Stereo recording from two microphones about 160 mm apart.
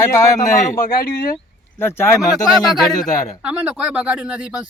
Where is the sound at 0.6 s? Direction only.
65° left (ahead or behind).